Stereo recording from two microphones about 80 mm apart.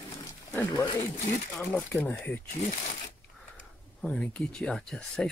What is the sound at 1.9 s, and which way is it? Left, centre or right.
Speech, left.